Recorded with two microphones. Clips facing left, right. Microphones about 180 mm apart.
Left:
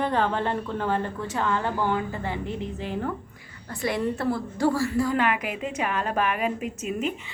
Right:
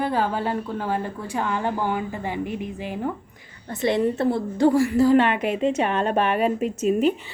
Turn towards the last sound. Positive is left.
turn(degrees=-35)  # may be behind; listen again after turning